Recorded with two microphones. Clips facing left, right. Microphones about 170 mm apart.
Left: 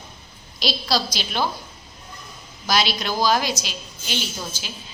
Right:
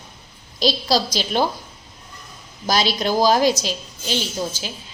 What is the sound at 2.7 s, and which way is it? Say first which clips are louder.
A woman's voice: right 3 dB; 40° right (ahead or behind).